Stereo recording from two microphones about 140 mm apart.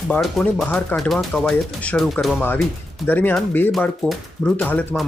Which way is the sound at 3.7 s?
Centre (ahead or behind).